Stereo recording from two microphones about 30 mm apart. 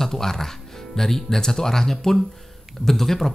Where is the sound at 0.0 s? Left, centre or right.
Centre.